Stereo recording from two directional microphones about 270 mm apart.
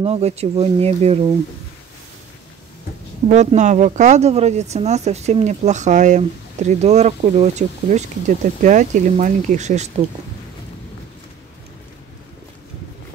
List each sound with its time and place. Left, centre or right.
0.0 s speech: right
3.3 s speech: right